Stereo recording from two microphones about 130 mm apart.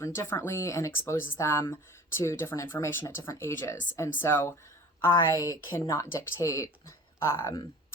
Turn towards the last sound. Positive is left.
turn(degrees=20)  # may be behind; listen again after turning